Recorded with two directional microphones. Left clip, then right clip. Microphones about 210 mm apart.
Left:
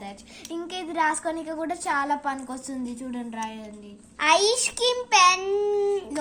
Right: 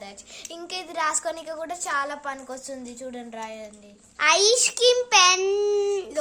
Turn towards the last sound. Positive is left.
turn(degrees=-20)  # may be behind; listen again after turning